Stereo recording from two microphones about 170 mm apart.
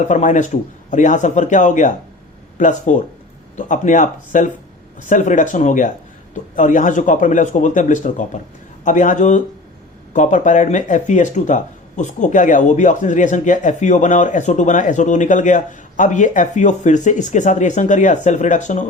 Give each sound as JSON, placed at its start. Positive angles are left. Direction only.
{"t": 0.1, "sound": "speech", "side_deg": 45}